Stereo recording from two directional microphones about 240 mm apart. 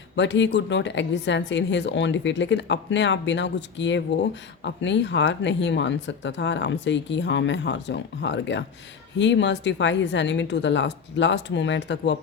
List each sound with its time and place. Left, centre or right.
0.2 s a woman's voice: left